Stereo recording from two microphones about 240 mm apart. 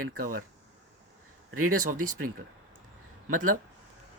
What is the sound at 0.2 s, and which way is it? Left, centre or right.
Speech, right.